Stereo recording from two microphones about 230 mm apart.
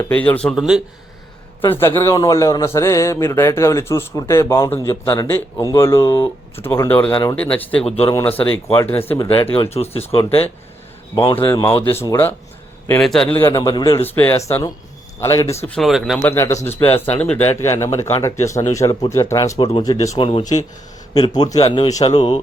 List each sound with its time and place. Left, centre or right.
0.0 s speech: centre
1.7 s a man's voice: centre
7.9 s speech: left
8.1 s a man's voice: centre
9.3 s speech: left
11.1 s a man's voice: centre